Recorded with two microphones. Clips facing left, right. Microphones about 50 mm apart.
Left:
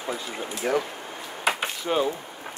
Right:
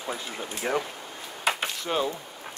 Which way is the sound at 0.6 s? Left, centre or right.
Centre.